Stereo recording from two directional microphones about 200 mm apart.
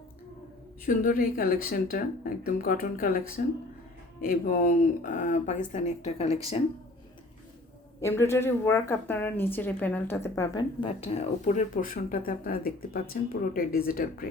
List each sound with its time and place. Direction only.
0.9 s speech: 45° left (ahead or behind)
8.0 s a woman's voice: 15° left (ahead or behind); by 14.3 s 45° left (ahead or behind)